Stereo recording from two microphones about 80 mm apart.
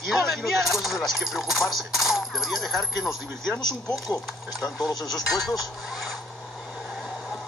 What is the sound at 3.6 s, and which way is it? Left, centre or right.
Speech, left.